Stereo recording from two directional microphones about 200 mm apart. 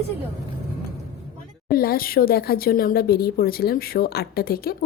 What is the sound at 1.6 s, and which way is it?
Speech, 50° left (ahead or behind).